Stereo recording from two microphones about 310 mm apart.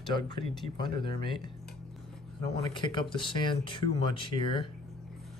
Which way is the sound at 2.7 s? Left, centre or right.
Centre.